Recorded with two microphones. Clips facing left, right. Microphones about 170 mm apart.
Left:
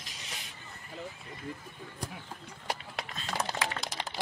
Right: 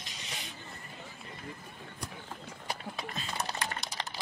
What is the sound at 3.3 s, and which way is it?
Typing, 90° left.